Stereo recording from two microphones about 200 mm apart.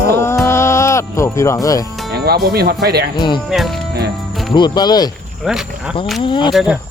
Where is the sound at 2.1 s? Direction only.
50° right (ahead or behind).